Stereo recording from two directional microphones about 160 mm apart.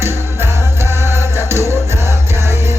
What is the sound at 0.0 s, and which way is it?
Music, 15° right (ahead or behind).